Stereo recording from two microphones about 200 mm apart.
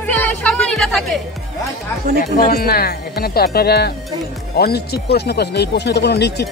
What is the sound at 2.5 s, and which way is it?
Speech, 50° left (ahead or behind).